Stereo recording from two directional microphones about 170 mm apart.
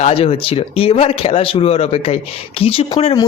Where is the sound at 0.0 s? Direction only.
35° left (ahead or behind).